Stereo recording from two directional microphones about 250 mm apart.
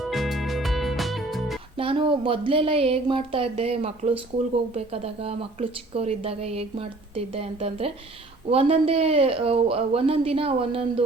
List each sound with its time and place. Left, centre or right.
0.0 s music: centre
1.7 s speech: right